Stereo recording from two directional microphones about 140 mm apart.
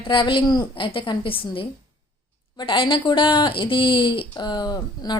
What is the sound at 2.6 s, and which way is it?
A woman's voice, 35° left (ahead or behind).